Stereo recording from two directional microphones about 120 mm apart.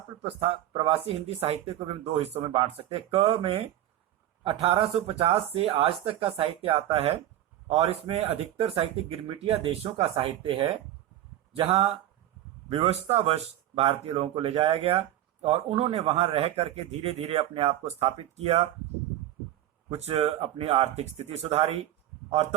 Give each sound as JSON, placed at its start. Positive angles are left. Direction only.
{"t": 0.3, "sound": "speech", "side_deg": -55}
{"t": 19.9, "sound": "speech", "side_deg": -60}